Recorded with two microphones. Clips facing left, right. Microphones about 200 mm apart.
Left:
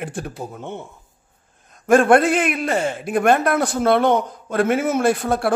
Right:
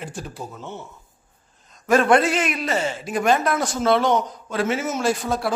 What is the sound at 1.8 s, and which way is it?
A man's voice, 50° left (ahead or behind).